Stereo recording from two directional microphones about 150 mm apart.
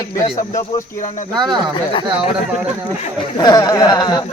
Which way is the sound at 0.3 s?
55° left (ahead or behind).